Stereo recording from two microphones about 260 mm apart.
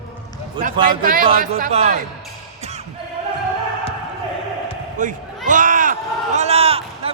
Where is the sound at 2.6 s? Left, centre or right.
Right.